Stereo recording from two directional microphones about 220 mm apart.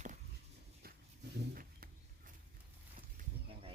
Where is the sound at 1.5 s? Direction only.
40° right (ahead or behind).